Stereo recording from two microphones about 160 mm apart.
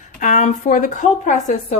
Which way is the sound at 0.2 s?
50° left (ahead or behind).